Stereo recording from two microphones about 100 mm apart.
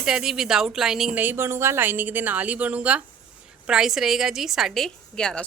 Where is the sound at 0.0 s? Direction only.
5° right (ahead or behind).